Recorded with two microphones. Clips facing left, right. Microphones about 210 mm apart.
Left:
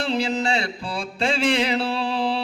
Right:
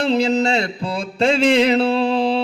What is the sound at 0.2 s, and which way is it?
Mantra, 40° right (ahead or behind).